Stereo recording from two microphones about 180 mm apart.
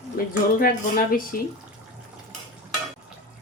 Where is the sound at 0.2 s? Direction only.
55° left (ahead or behind).